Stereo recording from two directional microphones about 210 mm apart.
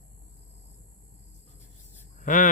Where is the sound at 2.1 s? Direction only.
40° left (ahead or behind).